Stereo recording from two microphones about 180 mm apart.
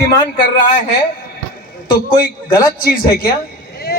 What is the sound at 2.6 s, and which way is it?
Speech, 55° left (ahead or behind).